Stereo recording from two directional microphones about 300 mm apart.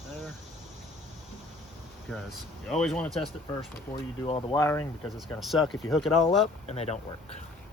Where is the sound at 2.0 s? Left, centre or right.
Centre.